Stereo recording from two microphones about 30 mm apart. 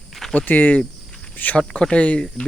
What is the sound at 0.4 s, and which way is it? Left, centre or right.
Speech, left.